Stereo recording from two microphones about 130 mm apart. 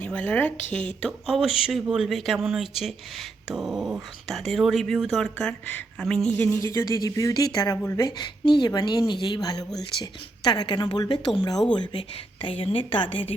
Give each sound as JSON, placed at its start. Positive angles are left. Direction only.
{"t": 0.0, "sound": "speech", "side_deg": 15}
{"t": 1.0, "sound": "speech", "side_deg": 0}
{"t": 6.6, "sound": "a woman's voice", "side_deg": 25}